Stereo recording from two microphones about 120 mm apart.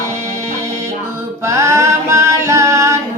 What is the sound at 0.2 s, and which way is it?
Music, 70° right (ahead or behind).